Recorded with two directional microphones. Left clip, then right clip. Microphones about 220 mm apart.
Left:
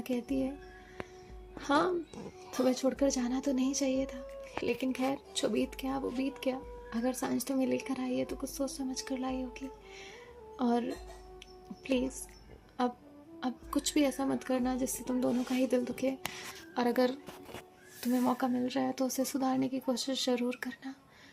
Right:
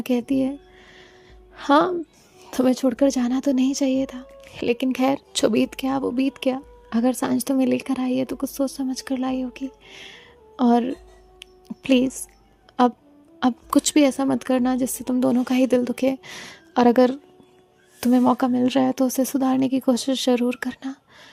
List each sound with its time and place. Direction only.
0.0 s speech: 45° right (ahead or behind)
1.5 s speech: 40° right (ahead or behind)
11.3 s music: 45° right (ahead or behind)
12.8 s speech: 40° right (ahead or behind)